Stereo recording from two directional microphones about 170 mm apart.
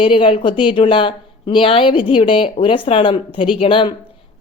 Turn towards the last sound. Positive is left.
turn(degrees=30)  # may be behind; listen again after turning